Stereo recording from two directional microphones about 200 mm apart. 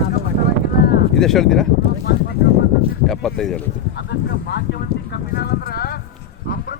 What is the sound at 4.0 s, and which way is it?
Speech, 55° left (ahead or behind).